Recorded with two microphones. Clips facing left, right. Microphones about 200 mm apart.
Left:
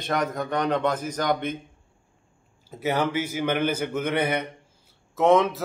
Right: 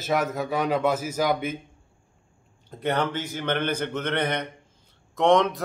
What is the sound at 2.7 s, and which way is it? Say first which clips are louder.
A man's voice: left 1 dB; 5° left (ahead or behind).